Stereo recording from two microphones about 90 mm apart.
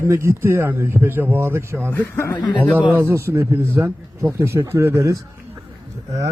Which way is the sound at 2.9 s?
20° right (ahead or behind).